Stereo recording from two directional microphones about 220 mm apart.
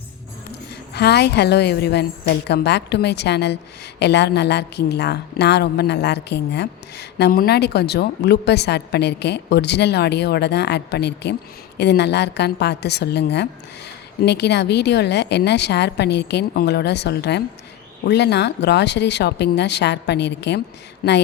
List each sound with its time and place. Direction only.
0.9 s a woman's voice: 50° left (ahead or behind)